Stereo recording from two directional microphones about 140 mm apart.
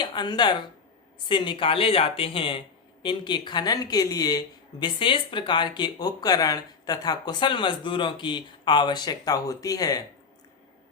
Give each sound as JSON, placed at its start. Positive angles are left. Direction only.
{"t": 0.0, "sound": "speech", "side_deg": 30}